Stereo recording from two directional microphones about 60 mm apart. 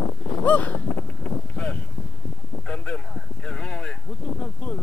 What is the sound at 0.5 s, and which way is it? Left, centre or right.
Speech, left.